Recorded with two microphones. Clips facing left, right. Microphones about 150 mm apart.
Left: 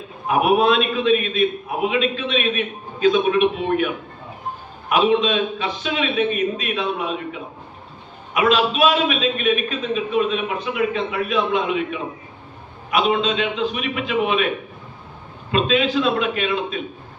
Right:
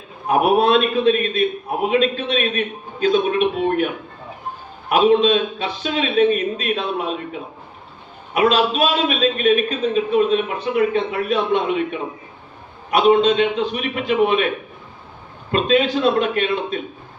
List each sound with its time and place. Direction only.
0.3 s a man's voice: 40° right (ahead or behind)
4.9 s a man's voice: 35° right (ahead or behind)
8.3 s a man's voice: 40° right (ahead or behind)
15.5 s a man's voice: 45° right (ahead or behind)